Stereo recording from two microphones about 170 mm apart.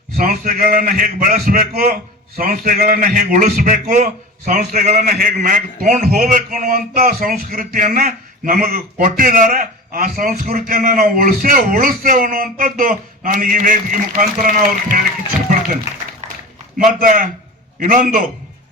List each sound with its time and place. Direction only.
0.2 s a man's voice: 55° right (ahead or behind)
16.7 s a man's voice: 55° right (ahead or behind)